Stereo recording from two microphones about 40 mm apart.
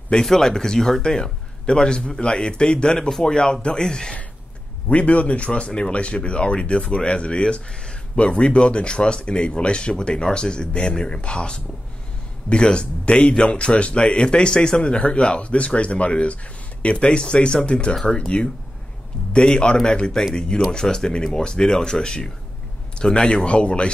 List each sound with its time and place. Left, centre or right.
0.2 s speech: centre
4.8 s speech: left